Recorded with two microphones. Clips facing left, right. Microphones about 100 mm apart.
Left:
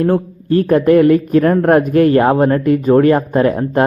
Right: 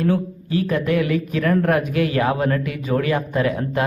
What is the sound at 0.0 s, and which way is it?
Speech, 50° left (ahead or behind).